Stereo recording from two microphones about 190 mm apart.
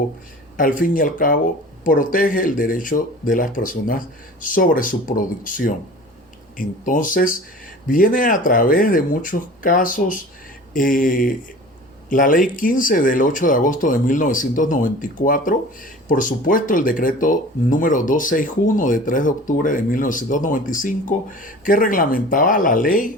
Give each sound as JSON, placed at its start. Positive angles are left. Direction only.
{"t": 0.8, "sound": "speech", "side_deg": 45}